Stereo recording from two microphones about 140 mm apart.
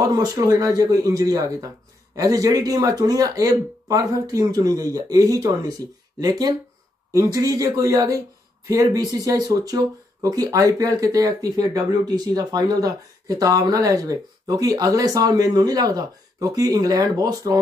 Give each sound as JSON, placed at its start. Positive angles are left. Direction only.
{"t": 0.0, "sound": "speech", "side_deg": -25}